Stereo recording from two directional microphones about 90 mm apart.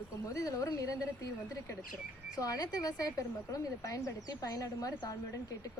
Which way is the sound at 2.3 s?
40° left (ahead or behind).